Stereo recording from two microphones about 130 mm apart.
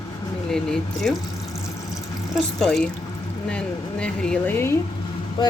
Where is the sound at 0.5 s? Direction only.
5° left (ahead or behind).